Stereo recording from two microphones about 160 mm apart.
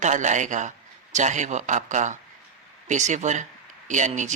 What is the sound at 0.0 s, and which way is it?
Speech, 50° right (ahead or behind).